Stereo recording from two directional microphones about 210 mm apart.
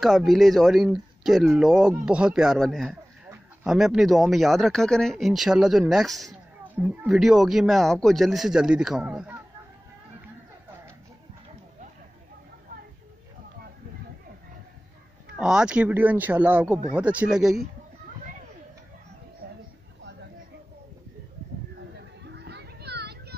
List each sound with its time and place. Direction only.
0.0 s speech: centre (ahead or behind)
15.3 s speech: centre (ahead or behind)
19.4 s a sound: 45° right (ahead or behind)
22.2 s children playing: 55° right (ahead or behind)